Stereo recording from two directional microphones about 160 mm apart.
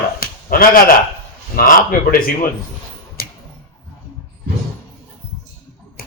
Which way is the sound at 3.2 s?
70° left (ahead or behind).